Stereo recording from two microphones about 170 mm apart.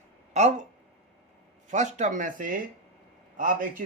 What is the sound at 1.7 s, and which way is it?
Speech, 45° right (ahead or behind).